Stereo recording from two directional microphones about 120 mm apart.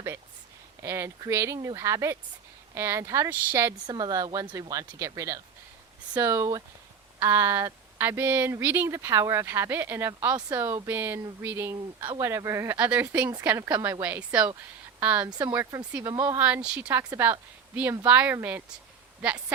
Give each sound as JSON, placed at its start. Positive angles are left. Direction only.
{"t": 0.8, "sound": "speech", "side_deg": -25}
{"t": 3.8, "sound": "a woman's voice", "side_deg": -35}
{"t": 12.7, "sound": "speech", "side_deg": -10}
{"t": 15.3, "sound": "a woman's voice", "side_deg": -35}
{"t": 15.9, "sound": "speech", "side_deg": -15}
{"t": 17.0, "sound": "speech", "side_deg": -20}